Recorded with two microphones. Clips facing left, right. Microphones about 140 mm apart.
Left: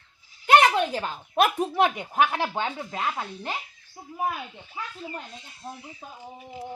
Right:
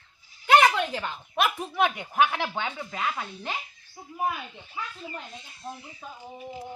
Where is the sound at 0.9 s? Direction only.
40° left (ahead or behind).